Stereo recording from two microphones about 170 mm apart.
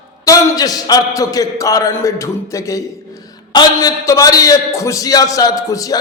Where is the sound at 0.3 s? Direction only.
20° left (ahead or behind).